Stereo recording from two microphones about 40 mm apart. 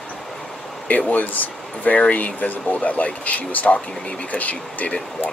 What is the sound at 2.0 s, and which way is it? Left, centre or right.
Speech, left.